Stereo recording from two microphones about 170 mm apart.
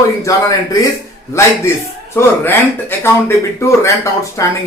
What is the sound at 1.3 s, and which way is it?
A man's voice, 15° left (ahead or behind).